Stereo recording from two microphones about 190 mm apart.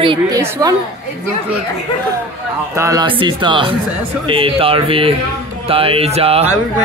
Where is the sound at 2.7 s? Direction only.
20° right (ahead or behind).